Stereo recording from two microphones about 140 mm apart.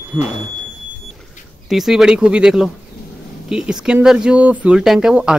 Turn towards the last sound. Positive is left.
turn(degrees=-5)  # may be behind; listen again after turning